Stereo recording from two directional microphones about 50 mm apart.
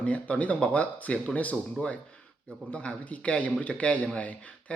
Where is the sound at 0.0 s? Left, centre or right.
Left.